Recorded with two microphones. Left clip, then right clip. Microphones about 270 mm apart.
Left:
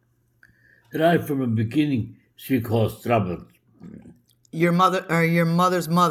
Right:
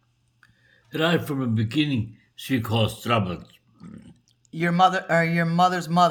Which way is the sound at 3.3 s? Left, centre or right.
Right.